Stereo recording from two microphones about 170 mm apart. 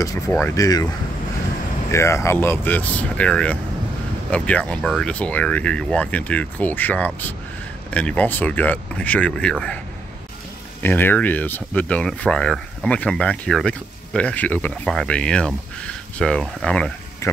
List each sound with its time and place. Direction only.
0.3 s speech: 15° left (ahead or behind)
1.9 s speech: 15° left (ahead or behind)
10.8 s speech: 10° left (ahead or behind)
17.2 s speech: 20° left (ahead or behind)